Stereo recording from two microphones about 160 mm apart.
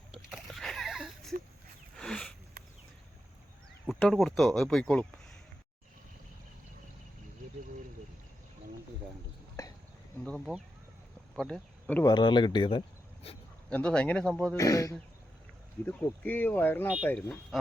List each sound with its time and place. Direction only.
0.1 s splash: centre (ahead or behind)
2.0 s a sound: 5° left (ahead or behind)
3.8 s speech: centre (ahead or behind)
9.6 s a sound: 20° left (ahead or behind)
10.2 s speech: 5° left (ahead or behind)
12.0 s speech: 30° left (ahead or behind)
13.2 s a sound: 40° left (ahead or behind)
13.7 s speech: 5° left (ahead or behind)
14.5 s speech: 20° left (ahead or behind)